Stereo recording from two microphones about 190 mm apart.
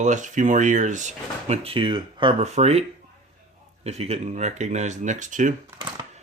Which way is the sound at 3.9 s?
35° right (ahead or behind).